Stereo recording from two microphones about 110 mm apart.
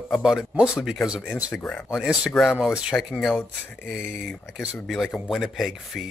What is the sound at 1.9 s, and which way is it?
Speech, 5° right (ahead or behind).